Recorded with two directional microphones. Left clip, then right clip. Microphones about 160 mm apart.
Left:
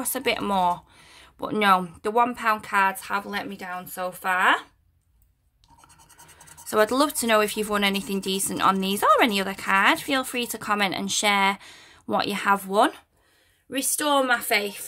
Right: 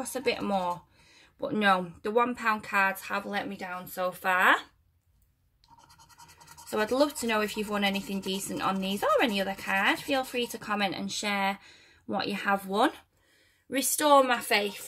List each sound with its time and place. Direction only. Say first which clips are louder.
0.0 s speech: left 4 dB; 45° left (ahead or behind); by 4.6 s 10° left (ahead or behind)
6.7 s a woman's voice: left 5 dB; 45° left (ahead or behind); by 13.0 s 25° left (ahead or behind)
13.7 s a woman's voice: right 1 dB; 5° left (ahead or behind)